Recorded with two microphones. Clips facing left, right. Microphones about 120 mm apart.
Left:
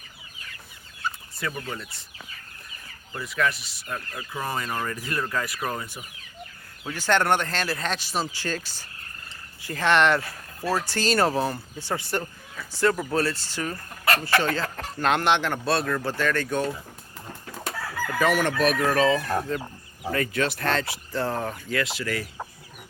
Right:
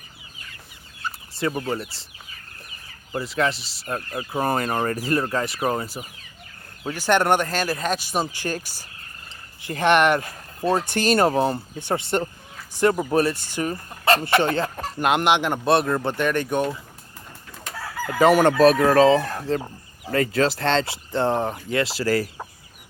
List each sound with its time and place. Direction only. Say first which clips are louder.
1.4 s chicken: right 9 dB; 30° right (ahead or behind)
3.1 s speech: right 3 dB; 30° right (ahead or behind)
4.3 s speech: right 7 dB; 45° right (ahead or behind)
5.0 s chicken: right 6 dB; 35° right (ahead or behind)
6.8 s speech: right 3 dB; 15° right (ahead or behind)
18.2 s chicken: right 8 dB; 35° right (ahead or behind)
20.1 s speech: right 6 dB; 30° right (ahead or behind)